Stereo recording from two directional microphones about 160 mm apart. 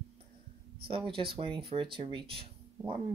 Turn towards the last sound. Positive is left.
turn(degrees=-35)  # may be behind; listen again after turning